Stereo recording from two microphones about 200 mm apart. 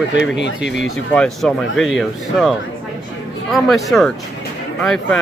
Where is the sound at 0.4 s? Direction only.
60° left (ahead or behind).